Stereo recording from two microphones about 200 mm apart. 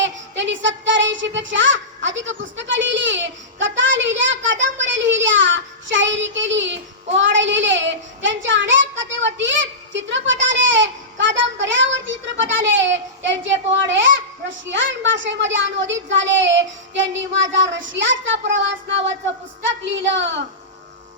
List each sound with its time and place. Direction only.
0.0 s child singing: 65° right (ahead or behind)
9.2 s a sound: 65° right (ahead or behind)
19.6 s a woman's voice: 65° right (ahead or behind)